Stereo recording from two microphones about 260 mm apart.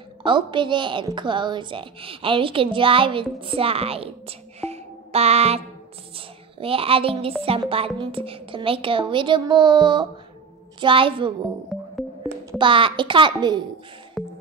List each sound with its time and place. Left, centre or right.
0.2 s a woman's voice: centre
12.4 s a woman's voice: centre
14.2 s music: centre